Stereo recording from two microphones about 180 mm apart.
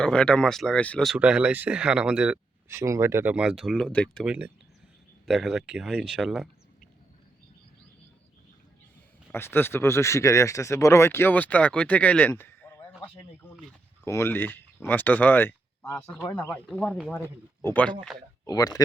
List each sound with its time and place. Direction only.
0.0 s speech: 5° left (ahead or behind)
9.3 s speech: 10° left (ahead or behind)
18.4 s speech: 20° left (ahead or behind)